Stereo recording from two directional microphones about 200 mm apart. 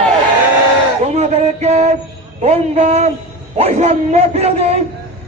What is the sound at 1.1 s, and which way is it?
A man's voice, 35° right (ahead or behind).